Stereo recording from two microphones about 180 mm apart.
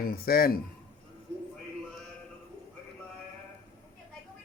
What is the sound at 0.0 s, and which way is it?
Speech, 55° left (ahead or behind).